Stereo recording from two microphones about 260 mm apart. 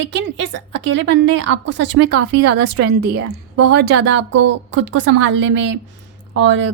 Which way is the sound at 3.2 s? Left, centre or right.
Right.